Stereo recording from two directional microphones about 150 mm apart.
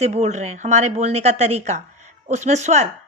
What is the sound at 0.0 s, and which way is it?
A woman's voice, 50° right (ahead or behind).